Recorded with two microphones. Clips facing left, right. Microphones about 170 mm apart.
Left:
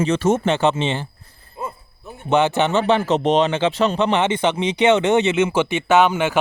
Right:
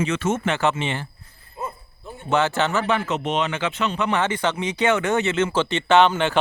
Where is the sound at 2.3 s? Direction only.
20° left (ahead or behind).